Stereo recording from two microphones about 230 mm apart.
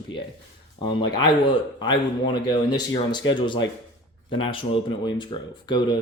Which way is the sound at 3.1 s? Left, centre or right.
Centre.